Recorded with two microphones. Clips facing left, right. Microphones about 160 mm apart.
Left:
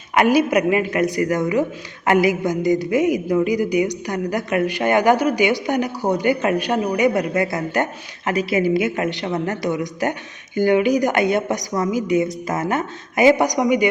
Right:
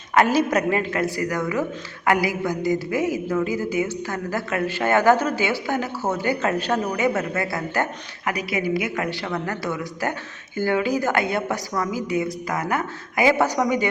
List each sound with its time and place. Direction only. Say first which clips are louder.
0.1 s a woman's voice: left 3 dB; 15° left (ahead or behind)